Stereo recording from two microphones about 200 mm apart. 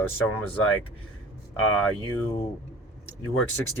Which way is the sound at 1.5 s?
90° left.